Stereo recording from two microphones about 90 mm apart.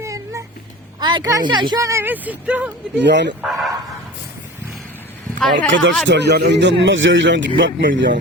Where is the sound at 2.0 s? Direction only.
20° right (ahead or behind).